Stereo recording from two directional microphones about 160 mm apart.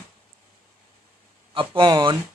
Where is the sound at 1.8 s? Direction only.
30° right (ahead or behind).